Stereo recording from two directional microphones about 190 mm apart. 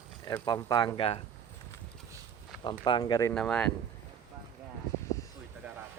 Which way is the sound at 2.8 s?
25° left (ahead or behind).